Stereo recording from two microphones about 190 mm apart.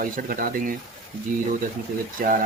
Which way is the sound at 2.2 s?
45° right (ahead or behind).